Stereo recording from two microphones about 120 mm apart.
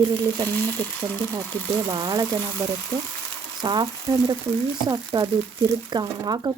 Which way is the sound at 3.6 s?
35° right (ahead or behind).